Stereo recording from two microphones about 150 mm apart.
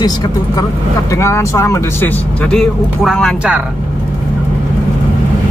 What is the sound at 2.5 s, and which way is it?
Speech, 5° left (ahead or behind).